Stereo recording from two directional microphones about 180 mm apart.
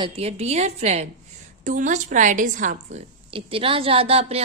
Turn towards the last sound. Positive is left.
turn(degrees=-35)  # may be behind; listen again after turning